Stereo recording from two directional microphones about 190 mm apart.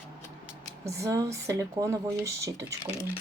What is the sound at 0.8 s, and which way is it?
Speech, 15° right (ahead or behind).